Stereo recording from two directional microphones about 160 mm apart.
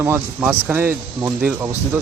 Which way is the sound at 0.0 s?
15° right (ahead or behind).